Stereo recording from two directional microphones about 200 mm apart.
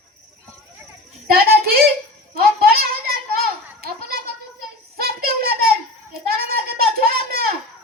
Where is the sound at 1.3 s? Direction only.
50° right (ahead or behind).